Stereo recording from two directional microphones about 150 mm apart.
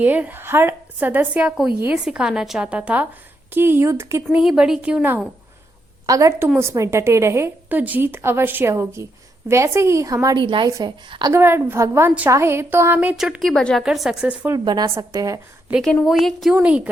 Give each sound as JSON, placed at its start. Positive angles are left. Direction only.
{"t": 0.0, "sound": "a woman's voice", "side_deg": -10}
{"t": 4.4, "sound": "a woman's voice", "side_deg": -5}
{"t": 6.1, "sound": "a woman's voice", "side_deg": -20}
{"t": 10.7, "sound": "a woman's voice", "side_deg": -20}
{"t": 11.3, "sound": "a woman's voice", "side_deg": -15}
{"t": 14.5, "sound": "a woman's voice", "side_deg": -30}
{"t": 15.7, "sound": "a woman's voice", "side_deg": 0}